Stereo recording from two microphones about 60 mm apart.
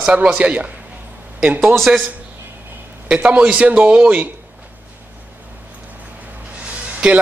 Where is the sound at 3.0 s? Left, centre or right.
Centre.